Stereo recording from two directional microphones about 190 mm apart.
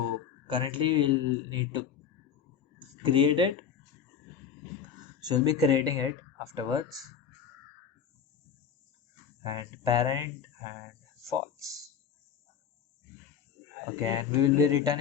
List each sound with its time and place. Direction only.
0.4 s speech: 25° right (ahead or behind)
3.0 s speech: 25° right (ahead or behind)
4.9 s speech: 20° right (ahead or behind)
9.4 s speech: 20° right (ahead or behind)
14.0 s speech: 20° right (ahead or behind)